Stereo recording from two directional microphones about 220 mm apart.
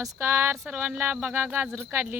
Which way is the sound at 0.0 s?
10° right (ahead or behind).